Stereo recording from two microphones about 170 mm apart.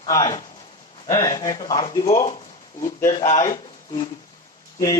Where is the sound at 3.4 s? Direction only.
30° left (ahead or behind).